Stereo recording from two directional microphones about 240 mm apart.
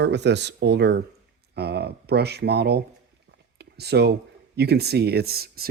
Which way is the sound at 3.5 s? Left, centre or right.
Right.